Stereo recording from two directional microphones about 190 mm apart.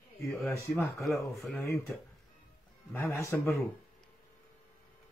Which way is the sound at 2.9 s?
10° left (ahead or behind).